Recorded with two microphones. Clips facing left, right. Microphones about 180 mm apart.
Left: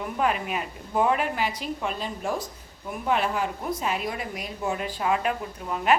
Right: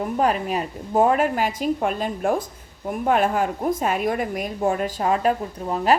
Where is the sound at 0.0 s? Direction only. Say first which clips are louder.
Right 5 dB; 40° right (ahead or behind).